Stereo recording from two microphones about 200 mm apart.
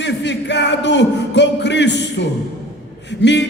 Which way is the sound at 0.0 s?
60° left (ahead or behind).